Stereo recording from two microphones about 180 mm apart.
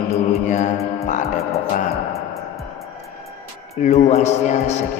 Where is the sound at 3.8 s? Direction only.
40° left (ahead or behind).